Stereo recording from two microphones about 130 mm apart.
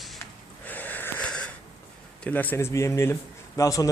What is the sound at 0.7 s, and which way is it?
Wheeze, 15° left (ahead or behind).